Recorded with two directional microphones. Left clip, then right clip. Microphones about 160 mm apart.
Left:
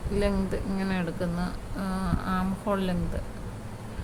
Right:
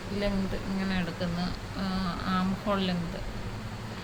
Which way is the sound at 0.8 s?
65° left (ahead or behind).